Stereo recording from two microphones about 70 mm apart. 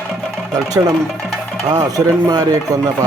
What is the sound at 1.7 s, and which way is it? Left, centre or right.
Stir, right.